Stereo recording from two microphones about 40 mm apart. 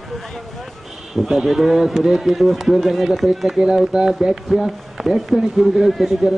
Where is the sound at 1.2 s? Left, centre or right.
Centre.